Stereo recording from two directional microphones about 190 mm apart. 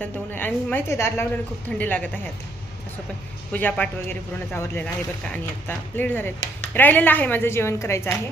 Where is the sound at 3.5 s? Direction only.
10° left (ahead or behind).